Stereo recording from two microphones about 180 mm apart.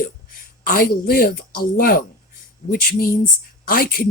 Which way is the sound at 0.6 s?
55° left (ahead or behind).